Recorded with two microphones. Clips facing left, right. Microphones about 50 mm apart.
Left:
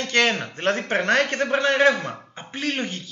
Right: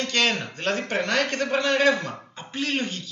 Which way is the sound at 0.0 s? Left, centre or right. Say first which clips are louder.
Left 3 dB; left.